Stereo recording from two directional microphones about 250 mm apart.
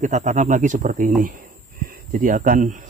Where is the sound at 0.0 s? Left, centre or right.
Right.